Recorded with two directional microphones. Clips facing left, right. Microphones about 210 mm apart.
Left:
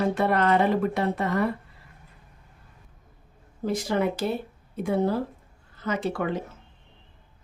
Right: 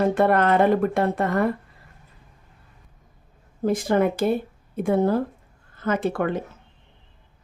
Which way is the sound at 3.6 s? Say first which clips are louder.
Right 5 dB; 50° right (ahead or behind).